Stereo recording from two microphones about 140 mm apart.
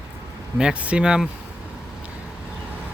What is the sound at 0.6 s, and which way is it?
Speech, 5° right (ahead or behind).